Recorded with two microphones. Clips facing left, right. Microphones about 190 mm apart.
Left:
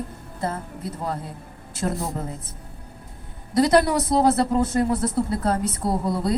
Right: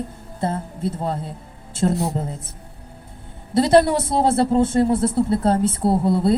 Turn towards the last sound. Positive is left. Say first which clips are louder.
# right 6 dB
turn(degrees=-25)  # may be behind; listen again after turning